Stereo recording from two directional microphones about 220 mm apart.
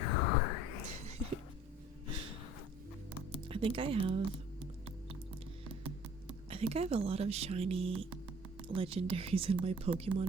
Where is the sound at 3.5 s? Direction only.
25° right (ahead or behind).